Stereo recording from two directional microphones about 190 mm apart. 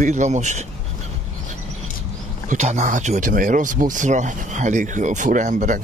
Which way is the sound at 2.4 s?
35° right (ahead or behind).